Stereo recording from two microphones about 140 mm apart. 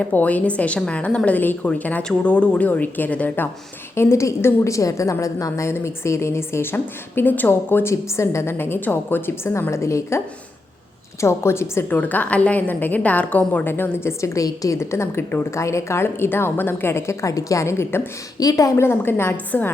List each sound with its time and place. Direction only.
0.0 s a woman's voice: 10° left (ahead or behind)